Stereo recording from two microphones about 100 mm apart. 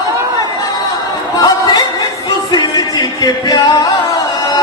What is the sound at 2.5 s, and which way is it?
Music, 45° left (ahead or behind).